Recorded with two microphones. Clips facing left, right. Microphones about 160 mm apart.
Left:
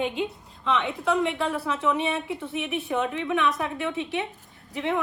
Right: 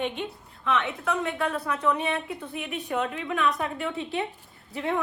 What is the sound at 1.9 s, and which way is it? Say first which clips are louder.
A woman's voice: left 1 dB; 5° left (ahead or behind).